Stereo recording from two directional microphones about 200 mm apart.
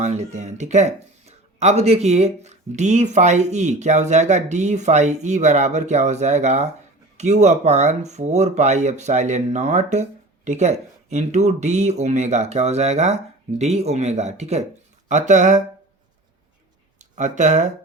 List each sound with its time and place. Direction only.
0.0 s speech: 35° right (ahead or behind)
17.0 s speech: 35° right (ahead or behind)